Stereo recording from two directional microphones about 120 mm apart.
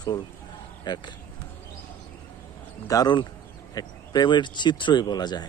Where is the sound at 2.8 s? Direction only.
30° left (ahead or behind).